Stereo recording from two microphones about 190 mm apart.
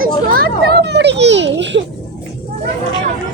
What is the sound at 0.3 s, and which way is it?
Children playing, 50° right (ahead or behind).